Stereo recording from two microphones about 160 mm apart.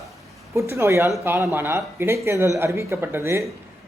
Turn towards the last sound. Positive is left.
turn(degrees=-15)  # may be behind; listen again after turning